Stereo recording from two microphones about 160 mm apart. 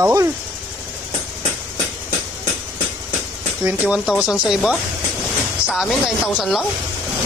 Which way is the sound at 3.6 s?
15° right (ahead or behind).